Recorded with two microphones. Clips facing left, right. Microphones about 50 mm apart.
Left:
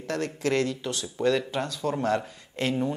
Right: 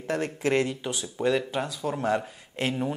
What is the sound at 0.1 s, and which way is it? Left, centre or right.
Speech, centre.